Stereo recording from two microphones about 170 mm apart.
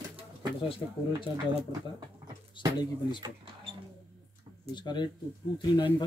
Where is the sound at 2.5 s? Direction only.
25° left (ahead or behind).